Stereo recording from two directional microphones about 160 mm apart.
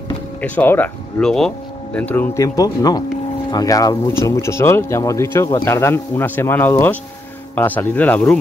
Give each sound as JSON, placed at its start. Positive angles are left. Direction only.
{"t": 0.4, "sound": "speech", "side_deg": 10}